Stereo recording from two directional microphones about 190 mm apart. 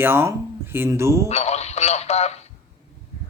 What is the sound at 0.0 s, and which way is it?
Speech, 15° right (ahead or behind).